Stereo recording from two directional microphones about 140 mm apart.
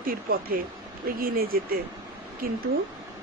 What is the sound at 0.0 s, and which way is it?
Speech, 90° right.